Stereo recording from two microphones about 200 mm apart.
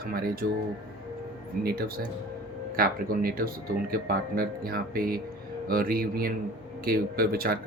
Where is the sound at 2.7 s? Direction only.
45° right (ahead or behind).